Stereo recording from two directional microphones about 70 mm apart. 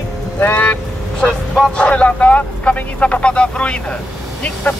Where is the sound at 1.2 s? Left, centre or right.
Centre.